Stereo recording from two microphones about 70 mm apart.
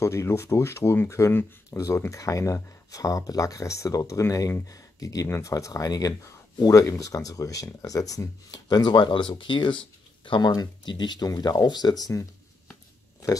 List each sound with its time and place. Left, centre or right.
0.0 s speech: left
2.0 s speech: left
6.7 s speech: left
13.2 s speech: left